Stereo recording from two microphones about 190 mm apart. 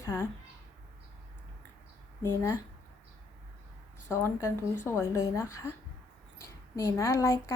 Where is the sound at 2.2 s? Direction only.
15° left (ahead or behind).